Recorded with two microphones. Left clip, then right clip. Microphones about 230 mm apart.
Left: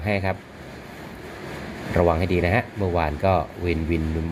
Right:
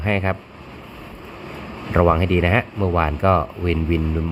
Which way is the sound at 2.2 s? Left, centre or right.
Right.